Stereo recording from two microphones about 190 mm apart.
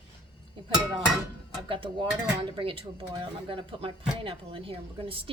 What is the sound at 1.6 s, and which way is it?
Speech, 25° right (ahead or behind).